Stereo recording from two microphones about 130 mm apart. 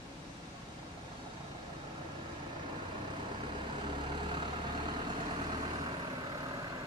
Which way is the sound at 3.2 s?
40° right (ahead or behind).